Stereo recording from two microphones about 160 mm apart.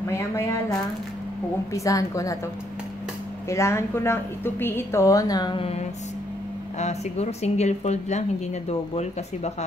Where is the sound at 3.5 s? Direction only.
15° left (ahead or behind).